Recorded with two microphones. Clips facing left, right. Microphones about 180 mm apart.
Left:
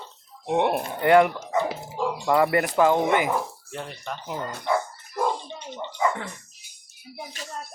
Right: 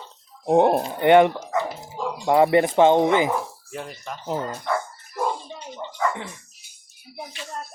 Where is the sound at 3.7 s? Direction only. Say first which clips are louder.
Even; centre (ahead or behind).